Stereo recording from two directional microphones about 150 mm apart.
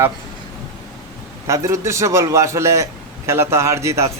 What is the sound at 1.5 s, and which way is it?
Speech, 20° right (ahead or behind).